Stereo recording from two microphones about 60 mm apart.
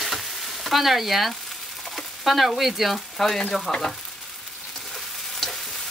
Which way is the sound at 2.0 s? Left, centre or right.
Centre.